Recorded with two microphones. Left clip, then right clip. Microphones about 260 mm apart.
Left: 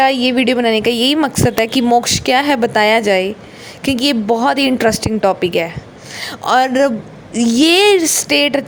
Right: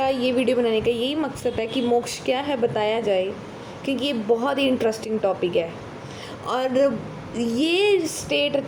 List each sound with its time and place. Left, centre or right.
0.0 s a woman's voice: left
8.3 s a woman's voice: left